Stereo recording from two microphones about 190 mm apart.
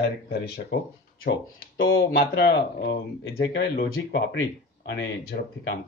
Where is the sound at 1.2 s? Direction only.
50° left (ahead or behind).